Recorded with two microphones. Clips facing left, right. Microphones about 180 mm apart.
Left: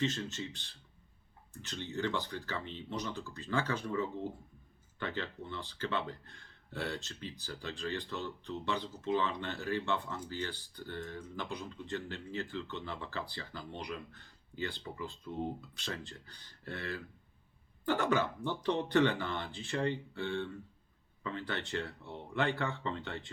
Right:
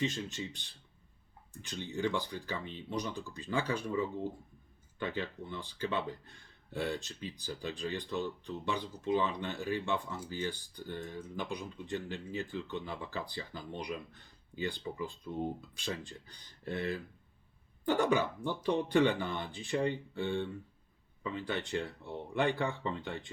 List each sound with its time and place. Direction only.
0.0 s speech: 15° right (ahead or behind)